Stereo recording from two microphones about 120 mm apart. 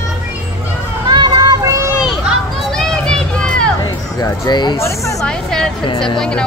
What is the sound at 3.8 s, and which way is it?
Music, 35° left (ahead or behind).